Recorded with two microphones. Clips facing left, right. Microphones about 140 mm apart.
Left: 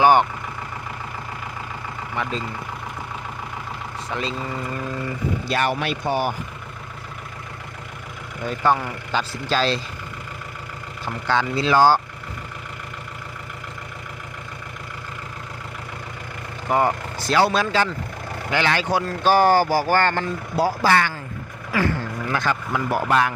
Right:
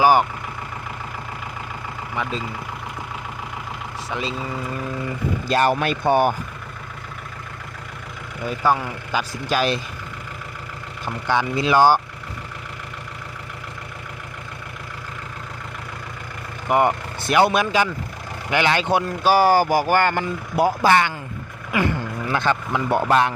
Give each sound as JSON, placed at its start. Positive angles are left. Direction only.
{"t": 0.0, "sound": "speech", "side_deg": -5}
{"t": 2.1, "sound": "speech", "side_deg": 0}
{"t": 4.1, "sound": "speech", "side_deg": -5}
{"t": 5.5, "sound": "speech", "side_deg": -40}
{"t": 8.4, "sound": "speech", "side_deg": -5}
{"t": 11.0, "sound": "speech", "side_deg": -15}
{"t": 16.6, "sound": "speech", "side_deg": -20}
{"t": 19.2, "sound": "speech", "side_deg": -10}